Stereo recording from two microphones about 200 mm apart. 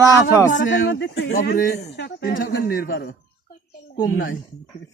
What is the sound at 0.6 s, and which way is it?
Speech, 60° left (ahead or behind).